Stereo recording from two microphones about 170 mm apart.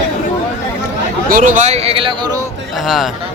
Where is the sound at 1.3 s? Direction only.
50° right (ahead or behind); by 2.1 s 35° right (ahead or behind).